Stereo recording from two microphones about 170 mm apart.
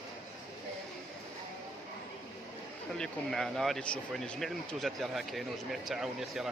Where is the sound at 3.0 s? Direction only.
Centre (ahead or behind).